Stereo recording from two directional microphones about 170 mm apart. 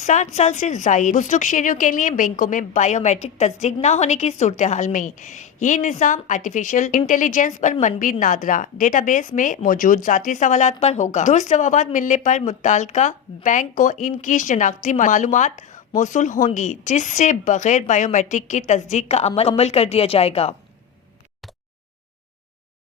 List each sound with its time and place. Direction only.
0.0 s a woman's voice: 45° left (ahead or behind)